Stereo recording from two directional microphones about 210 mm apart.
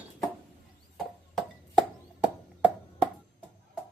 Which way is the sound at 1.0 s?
Centre (ahead or behind).